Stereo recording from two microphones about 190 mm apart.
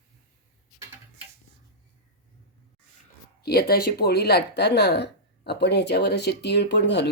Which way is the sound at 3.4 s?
55° left (ahead or behind).